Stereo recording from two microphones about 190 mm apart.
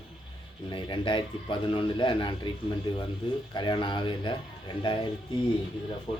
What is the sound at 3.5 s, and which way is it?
Speech, 25° left (ahead or behind).